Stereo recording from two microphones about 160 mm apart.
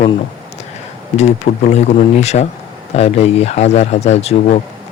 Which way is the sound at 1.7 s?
45° left (ahead or behind).